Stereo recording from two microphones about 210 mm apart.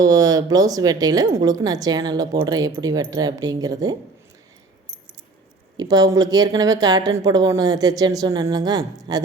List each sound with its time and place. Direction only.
0.0 s a woman's voice: 15° right (ahead or behind)
5.7 s a woman's voice: 20° right (ahead or behind)